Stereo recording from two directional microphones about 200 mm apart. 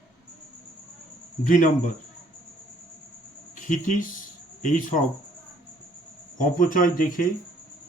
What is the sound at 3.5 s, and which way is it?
Speech, 40° left (ahead or behind).